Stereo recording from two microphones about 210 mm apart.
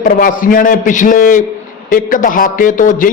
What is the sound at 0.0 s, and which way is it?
A man's voice, 40° left (ahead or behind).